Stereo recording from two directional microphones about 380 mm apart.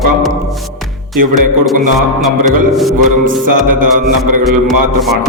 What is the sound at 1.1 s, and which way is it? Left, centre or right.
Music, right.